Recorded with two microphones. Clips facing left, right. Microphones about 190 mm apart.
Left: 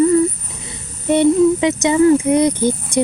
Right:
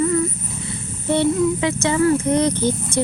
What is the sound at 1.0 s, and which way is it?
Speech, 15° left (ahead or behind).